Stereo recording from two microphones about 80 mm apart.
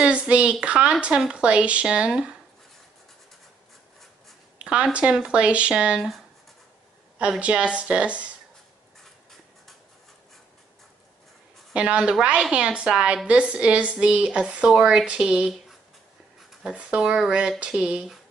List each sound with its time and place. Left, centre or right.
0.0 s speech: centre
4.6 s speech: centre
7.2 s speech: centre
11.7 s speech: centre
16.6 s speech: centre